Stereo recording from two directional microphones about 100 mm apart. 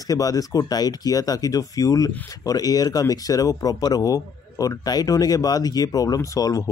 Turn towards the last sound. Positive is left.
turn(degrees=35)  # may be behind; listen again after turning